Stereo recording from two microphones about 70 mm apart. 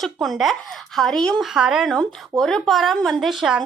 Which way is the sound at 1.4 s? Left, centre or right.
Centre.